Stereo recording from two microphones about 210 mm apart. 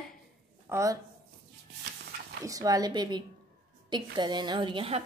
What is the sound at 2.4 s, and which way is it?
A woman's voice, 15° right (ahead or behind).